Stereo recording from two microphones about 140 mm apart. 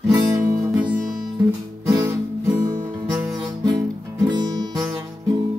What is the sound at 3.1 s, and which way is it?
Music, centre (ahead or behind).